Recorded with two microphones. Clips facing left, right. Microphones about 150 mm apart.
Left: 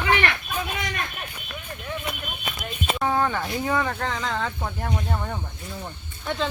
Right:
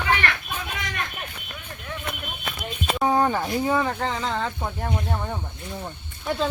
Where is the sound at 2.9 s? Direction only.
20° right (ahead or behind).